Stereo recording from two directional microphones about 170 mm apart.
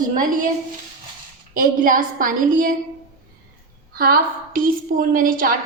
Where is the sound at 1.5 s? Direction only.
50° right (ahead or behind).